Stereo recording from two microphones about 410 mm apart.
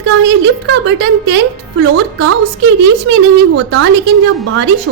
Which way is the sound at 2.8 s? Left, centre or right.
Right.